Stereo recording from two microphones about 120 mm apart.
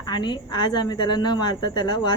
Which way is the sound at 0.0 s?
40° left (ahead or behind).